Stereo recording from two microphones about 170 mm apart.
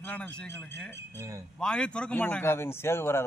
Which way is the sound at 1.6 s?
5° left (ahead or behind).